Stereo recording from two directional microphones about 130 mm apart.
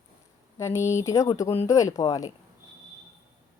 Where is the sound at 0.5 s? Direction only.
20° left (ahead or behind).